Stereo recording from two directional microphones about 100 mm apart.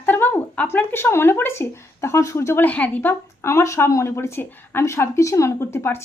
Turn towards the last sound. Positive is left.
turn(degrees=25)  # may be behind; listen again after turning